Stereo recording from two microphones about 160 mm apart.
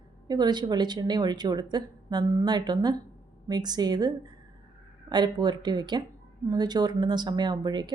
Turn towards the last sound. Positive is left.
turn(degrees=-25)  # may be behind; listen again after turning